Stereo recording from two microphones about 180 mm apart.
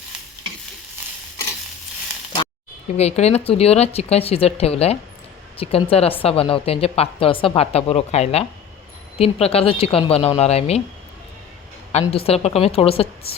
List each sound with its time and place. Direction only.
3.0 s speech: 35° left (ahead or behind)
11.9 s speech: 35° left (ahead or behind)